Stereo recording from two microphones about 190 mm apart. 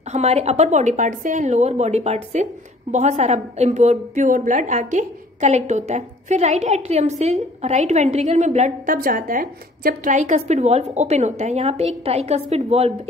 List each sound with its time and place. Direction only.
0.1 s a woman's voice: 35° right (ahead or behind)